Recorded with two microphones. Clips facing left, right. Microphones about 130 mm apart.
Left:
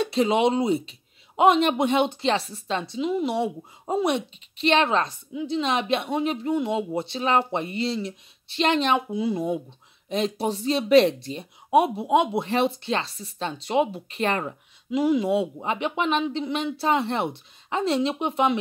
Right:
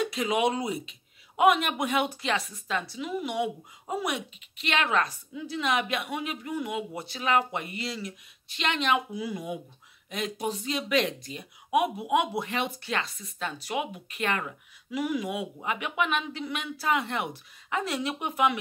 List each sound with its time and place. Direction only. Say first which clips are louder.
0.0 s speech: left 5 dB; 30° left (ahead or behind)